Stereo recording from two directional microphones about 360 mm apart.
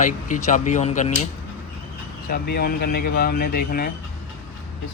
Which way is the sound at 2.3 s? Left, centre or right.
Left.